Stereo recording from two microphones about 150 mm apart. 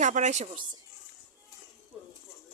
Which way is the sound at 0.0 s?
55° right (ahead or behind).